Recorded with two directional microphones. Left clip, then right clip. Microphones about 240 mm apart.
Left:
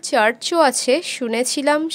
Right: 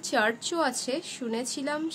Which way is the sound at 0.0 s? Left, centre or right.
Left.